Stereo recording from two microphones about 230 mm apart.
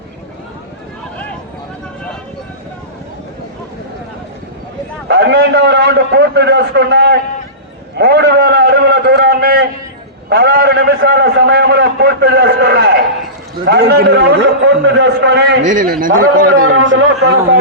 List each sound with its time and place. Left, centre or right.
5.0 s a man's voice: right
7.9 s a sound: right
10.2 s a man's voice: right
15.6 s a man's voice: right
16.6 s a man's voice: right